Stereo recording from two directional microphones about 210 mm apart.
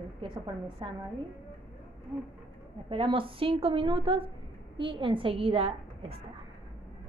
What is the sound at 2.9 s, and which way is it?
A woman's voice, 25° right (ahead or behind).